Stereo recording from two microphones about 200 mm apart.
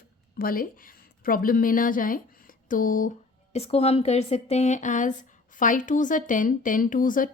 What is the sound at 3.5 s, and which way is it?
Speech, 30° left (ahead or behind).